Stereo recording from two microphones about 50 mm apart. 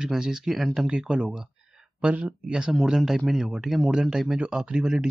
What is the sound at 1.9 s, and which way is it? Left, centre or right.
Speech, right.